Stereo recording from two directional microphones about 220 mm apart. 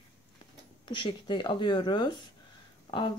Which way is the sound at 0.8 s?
20° left (ahead or behind).